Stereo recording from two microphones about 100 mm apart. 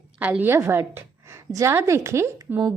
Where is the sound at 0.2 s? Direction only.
15° right (ahead or behind).